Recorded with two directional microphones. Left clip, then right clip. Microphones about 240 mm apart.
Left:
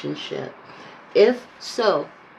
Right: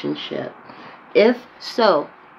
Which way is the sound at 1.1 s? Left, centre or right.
Right.